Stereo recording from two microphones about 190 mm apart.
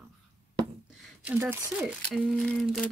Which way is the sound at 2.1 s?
5° left (ahead or behind).